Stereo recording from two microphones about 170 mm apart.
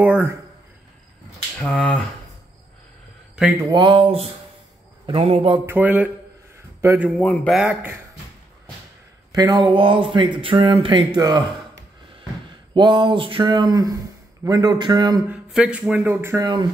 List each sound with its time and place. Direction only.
0.0 s speech: 10° right (ahead or behind)
1.6 s speech: 5° left (ahead or behind)
3.7 s speech: 25° right (ahead or behind)
5.7 s a man's voice: 10° right (ahead or behind)
7.1 s speech: 5° left (ahead or behind)
7.5 s speech: 5° right (ahead or behind)
9.3 s speech: 25° right (ahead or behind)
12.7 s speech: 30° right (ahead or behind)
15.2 s speech: 5° right (ahead or behind)